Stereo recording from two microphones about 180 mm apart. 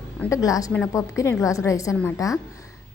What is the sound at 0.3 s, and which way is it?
Speech, 20° left (ahead or behind).